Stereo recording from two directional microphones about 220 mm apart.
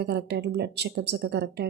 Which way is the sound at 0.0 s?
50° right (ahead or behind).